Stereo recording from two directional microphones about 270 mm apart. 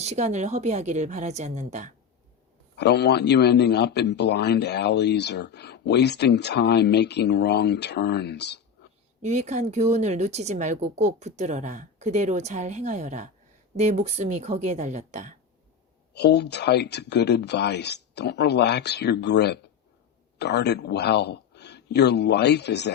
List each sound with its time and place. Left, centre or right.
0.0 s speech: right
2.7 s a man's voice: left
9.2 s speech: right
16.1 s a man's voice: left